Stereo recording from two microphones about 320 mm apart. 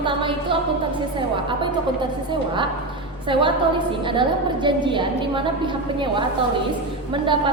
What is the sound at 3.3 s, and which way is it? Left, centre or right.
Speech, centre.